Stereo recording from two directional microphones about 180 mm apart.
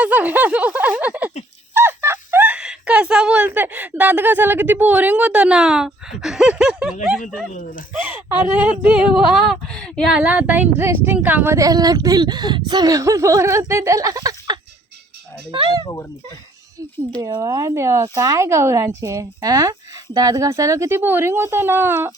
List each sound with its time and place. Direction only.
0.0 s speech: 10° right (ahead or behind)
7.5 s speech: 45° left (ahead or behind)
7.9 s speech: 10° right (ahead or behind)
10.2 s speech: 10° right (ahead or behind); by 15.8 s 30° right (ahead or behind)
17.2 s speech: 20° right (ahead or behind)